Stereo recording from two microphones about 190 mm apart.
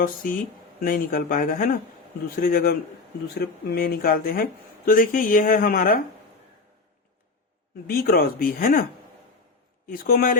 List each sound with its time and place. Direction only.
0.0 s speech: 45° left (ahead or behind)
7.9 s speech: 55° left (ahead or behind)
9.8 s speech: 50° left (ahead or behind)